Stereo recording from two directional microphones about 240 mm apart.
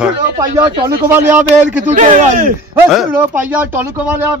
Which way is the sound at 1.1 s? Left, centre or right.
Centre.